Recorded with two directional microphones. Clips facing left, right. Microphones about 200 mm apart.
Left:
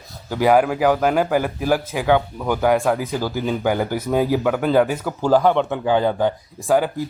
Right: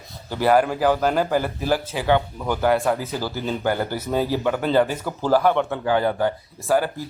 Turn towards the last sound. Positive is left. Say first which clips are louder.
# left 3 dB
turn(degrees=15)  # may be behind; listen again after turning